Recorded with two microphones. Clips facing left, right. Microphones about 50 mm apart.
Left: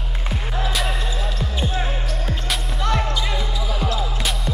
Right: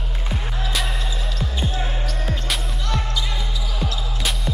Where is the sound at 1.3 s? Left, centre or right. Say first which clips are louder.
Even; left.